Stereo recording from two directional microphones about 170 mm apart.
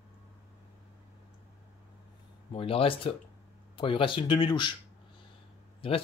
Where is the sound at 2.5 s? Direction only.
35° left (ahead or behind).